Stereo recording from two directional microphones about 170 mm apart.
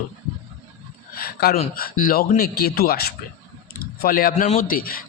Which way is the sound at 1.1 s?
60° left (ahead or behind).